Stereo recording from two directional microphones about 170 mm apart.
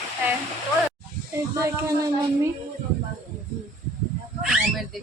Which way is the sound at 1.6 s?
15° right (ahead or behind).